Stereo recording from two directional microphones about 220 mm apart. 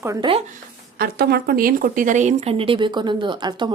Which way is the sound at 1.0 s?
45° right (ahead or behind).